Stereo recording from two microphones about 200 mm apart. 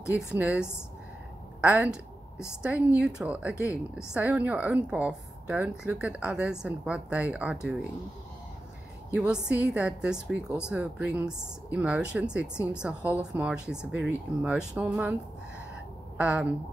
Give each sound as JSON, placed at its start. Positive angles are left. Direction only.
{"t": 0.2, "sound": "speech", "side_deg": -5}
{"t": 1.6, "sound": "a sound", "side_deg": -5}
{"t": 2.6, "sound": "a woman's voice", "side_deg": -5}
{"t": 9.1, "sound": "a woman's voice", "side_deg": -5}
{"t": 16.2, "sound": "a woman's voice", "side_deg": -5}